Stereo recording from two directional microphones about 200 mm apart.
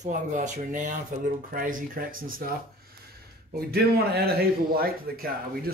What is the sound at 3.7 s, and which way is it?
Speech, 50° right (ahead or behind).